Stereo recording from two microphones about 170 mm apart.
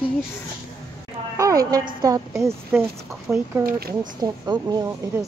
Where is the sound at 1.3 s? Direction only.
20° right (ahead or behind).